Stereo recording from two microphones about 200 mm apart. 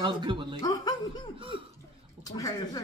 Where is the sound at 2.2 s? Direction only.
20° left (ahead or behind).